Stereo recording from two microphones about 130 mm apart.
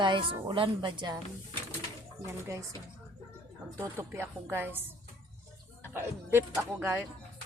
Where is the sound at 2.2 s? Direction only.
25° right (ahead or behind).